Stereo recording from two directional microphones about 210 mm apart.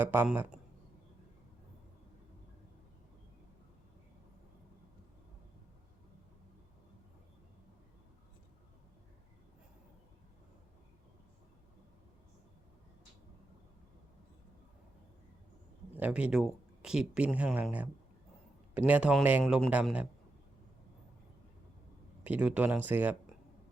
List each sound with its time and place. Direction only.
0.0 s a man's voice: 10° right (ahead or behind)
16.0 s a man's voice: 5° right (ahead or behind)
22.2 s a man's voice: 5° right (ahead or behind)